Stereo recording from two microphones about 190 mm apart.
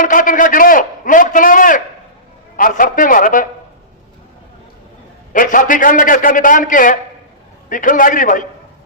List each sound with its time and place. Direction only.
0.0 s a man's voice: 45° left (ahead or behind)
5.3 s a man's voice: 45° left (ahead or behind)